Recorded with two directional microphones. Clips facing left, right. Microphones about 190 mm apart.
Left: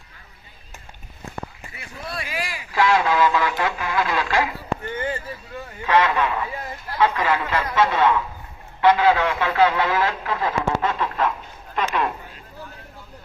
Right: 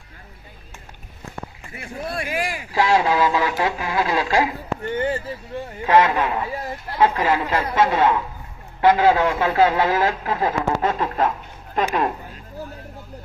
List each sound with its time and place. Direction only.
1.7 s speech: 50° right (ahead or behind)
2.7 s speech: 35° right (ahead or behind)